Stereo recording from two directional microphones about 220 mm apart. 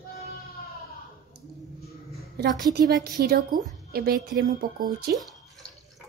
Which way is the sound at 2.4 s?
45° right (ahead or behind).